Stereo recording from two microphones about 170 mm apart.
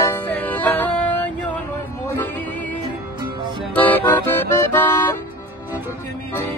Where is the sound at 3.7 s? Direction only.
10° left (ahead or behind).